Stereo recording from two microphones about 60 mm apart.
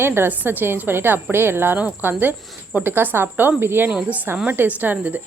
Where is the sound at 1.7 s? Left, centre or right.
Right.